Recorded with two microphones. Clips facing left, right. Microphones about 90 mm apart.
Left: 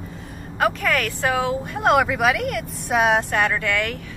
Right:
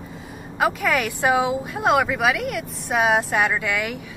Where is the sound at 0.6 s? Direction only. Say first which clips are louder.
Even; 5° right (ahead or behind).